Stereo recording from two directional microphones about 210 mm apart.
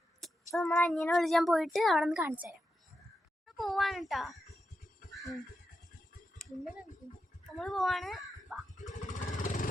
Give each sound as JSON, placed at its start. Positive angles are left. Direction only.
{"t": 0.2, "sound": "child singing", "side_deg": 0}
{"t": 0.8, "sound": "speech", "side_deg": 0}
{"t": 6.4, "sound": "a sound", "side_deg": 5}
{"t": 7.5, "sound": "speech", "side_deg": 0}
{"t": 8.7, "sound": "music", "side_deg": 35}
{"t": 9.4, "sound": "vehicle", "side_deg": 40}